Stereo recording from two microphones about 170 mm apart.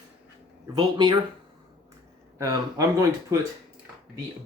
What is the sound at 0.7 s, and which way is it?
Speech, 25° right (ahead or behind).